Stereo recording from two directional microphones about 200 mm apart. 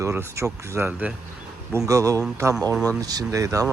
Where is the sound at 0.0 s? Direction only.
10° right (ahead or behind).